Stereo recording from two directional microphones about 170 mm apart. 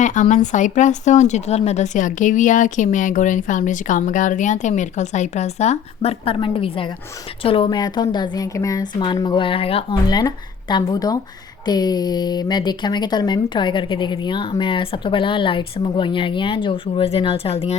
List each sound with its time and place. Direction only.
0.0 s a woman's voice: 45° left (ahead or behind)